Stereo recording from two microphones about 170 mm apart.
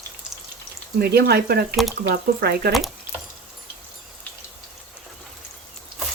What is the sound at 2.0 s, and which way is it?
Speech, 70° right (ahead or behind).